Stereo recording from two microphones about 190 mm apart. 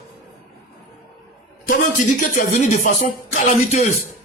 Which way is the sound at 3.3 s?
35° left (ahead or behind).